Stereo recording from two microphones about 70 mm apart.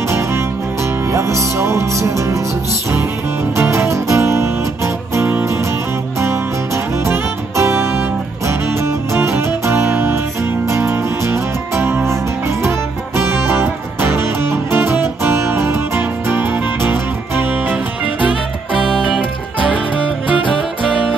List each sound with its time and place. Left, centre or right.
1.1 s music: right
3.5 s music: right
7.1 s music: right
9.1 s music: right